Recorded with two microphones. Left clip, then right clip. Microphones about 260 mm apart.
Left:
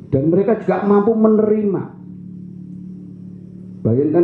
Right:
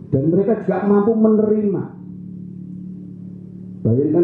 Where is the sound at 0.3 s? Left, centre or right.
Centre.